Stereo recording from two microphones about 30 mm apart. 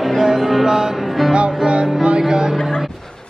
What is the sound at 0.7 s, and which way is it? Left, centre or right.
Music, centre.